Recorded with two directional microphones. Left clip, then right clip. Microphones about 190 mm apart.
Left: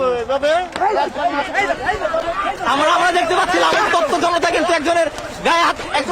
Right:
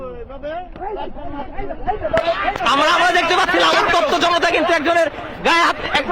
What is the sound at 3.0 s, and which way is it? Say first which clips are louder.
A man's voice: right 1 dB; centre (ahead or behind).